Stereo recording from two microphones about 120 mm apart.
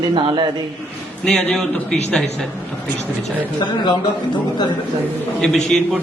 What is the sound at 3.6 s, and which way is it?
Speech, 35° left (ahead or behind).